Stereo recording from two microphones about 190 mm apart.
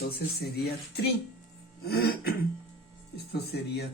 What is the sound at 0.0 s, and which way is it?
Speech, 55° left (ahead or behind).